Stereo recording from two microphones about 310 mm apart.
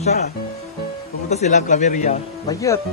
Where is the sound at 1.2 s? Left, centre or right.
Left.